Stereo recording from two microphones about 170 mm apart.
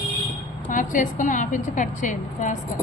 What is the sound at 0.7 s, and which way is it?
A woman's voice, 50° left (ahead or behind).